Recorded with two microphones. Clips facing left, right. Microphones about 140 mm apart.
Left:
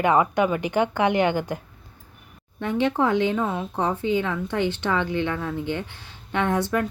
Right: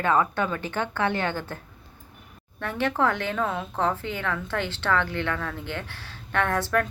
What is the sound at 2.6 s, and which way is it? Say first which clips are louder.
A woman's voice: left 3 dB; 15° left (ahead or behind).